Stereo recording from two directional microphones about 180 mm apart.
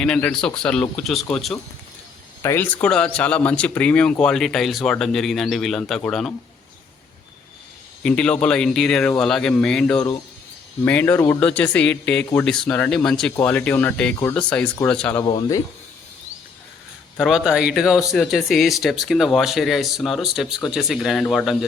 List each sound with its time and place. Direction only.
0.0 s speech: 5° left (ahead or behind)
2.4 s speech: 15° left (ahead or behind)
8.0 s speech: 5° left (ahead or behind)
15.2 s speech: 20° left (ahead or behind)
17.2 s speech: centre (ahead or behind)